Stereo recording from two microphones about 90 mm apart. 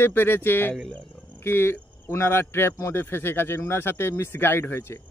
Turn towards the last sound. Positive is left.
turn(degrees=25)  # may be behind; listen again after turning